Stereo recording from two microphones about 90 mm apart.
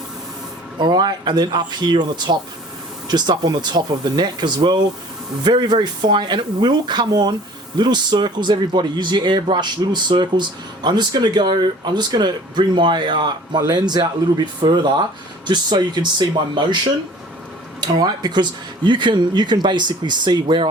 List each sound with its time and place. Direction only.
0.8 s speech: 55° right (ahead or behind)
13.6 s speech: 50° right (ahead or behind)